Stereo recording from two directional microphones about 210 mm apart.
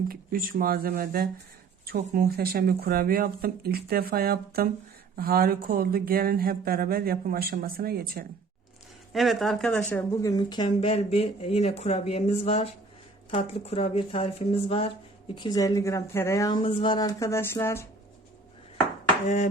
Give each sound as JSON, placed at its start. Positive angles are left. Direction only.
{"t": 0.1, "sound": "speech", "side_deg": -45}
{"t": 9.1, "sound": "speech", "side_deg": 0}